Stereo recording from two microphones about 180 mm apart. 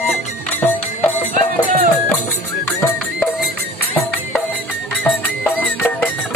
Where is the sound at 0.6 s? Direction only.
10° left (ahead or behind).